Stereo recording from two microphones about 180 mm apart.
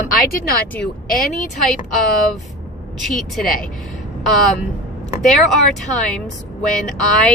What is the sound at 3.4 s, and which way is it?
Speech, 55° left (ahead or behind).